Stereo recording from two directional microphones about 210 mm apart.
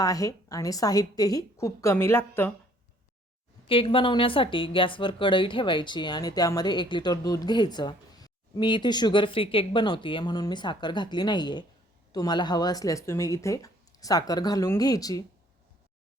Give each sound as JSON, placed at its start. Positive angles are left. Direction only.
{"t": 0.0, "sound": "speech", "side_deg": 15}
{"t": 3.7, "sound": "speech", "side_deg": 25}